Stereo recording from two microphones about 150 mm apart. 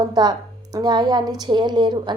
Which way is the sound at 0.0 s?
25° right (ahead or behind).